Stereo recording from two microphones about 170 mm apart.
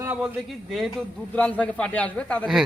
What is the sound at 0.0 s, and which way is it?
Speech, 10° right (ahead or behind).